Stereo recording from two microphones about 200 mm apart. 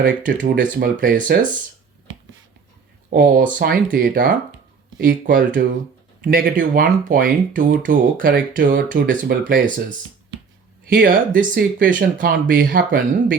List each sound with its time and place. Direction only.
0.0 s speech: 40° right (ahead or behind)
3.1 s speech: 45° right (ahead or behind)
10.8 s speech: 45° right (ahead or behind)